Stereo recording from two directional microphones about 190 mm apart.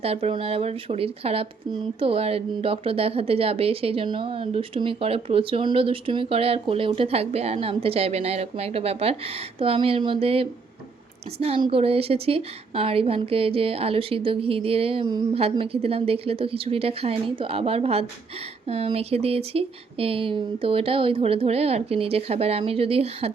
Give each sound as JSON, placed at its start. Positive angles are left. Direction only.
{"t": 0.0, "sound": "speech", "side_deg": -30}